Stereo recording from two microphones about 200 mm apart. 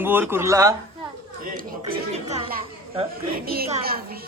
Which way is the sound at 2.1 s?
35° right (ahead or behind).